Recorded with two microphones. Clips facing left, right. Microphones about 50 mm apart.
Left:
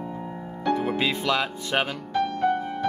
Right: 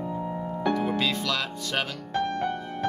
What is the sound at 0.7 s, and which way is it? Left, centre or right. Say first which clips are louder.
Speech: left 3 dB; centre.